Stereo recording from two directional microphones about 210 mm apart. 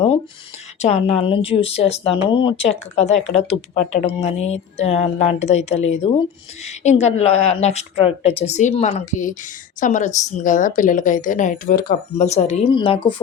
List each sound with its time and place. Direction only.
0.8 s speech: 30° left (ahead or behind)